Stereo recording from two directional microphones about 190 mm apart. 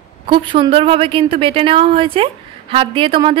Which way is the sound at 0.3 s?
25° right (ahead or behind).